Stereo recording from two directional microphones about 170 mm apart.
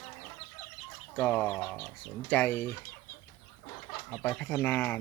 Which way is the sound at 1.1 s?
10° left (ahead or behind).